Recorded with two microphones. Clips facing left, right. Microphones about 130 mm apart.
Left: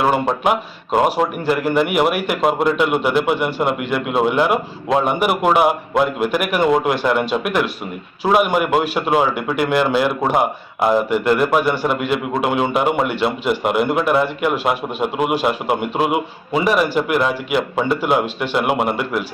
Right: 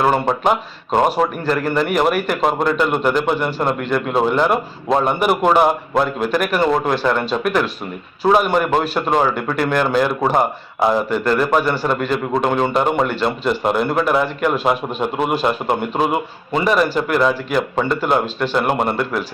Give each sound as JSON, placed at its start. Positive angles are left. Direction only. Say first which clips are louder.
{"t": 0.0, "sound": "a man's voice", "louder": "right 1 dB", "side_deg": 5}